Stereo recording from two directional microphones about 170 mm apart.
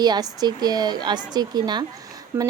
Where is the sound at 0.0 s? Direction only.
25° right (ahead or behind).